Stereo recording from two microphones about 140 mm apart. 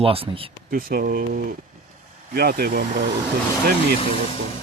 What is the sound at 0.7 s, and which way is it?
Speech, 90° right.